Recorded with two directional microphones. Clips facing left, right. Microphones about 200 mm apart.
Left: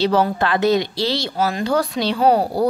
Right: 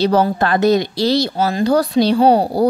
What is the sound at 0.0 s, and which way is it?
Speech, 40° right (ahead or behind).